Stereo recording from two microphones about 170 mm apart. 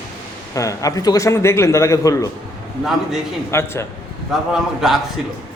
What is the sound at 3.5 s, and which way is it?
Speech, 15° left (ahead or behind).